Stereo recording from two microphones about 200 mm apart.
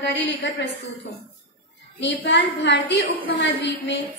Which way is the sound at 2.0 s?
60° left (ahead or behind).